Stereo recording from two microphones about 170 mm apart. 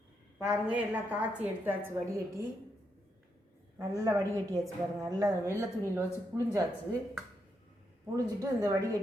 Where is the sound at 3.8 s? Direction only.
20° right (ahead or behind).